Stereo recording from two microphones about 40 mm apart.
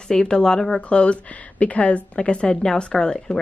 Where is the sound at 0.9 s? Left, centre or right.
Left.